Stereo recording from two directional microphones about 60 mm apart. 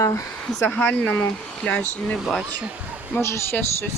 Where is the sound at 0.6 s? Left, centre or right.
Left.